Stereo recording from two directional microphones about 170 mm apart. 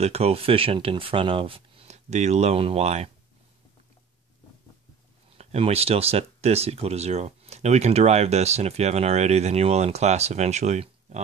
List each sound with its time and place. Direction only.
0.0 s speech: 35° right (ahead or behind)
5.4 s speech: 35° right (ahead or behind)